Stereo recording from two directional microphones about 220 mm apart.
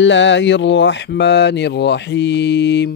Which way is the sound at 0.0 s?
55° left (ahead or behind).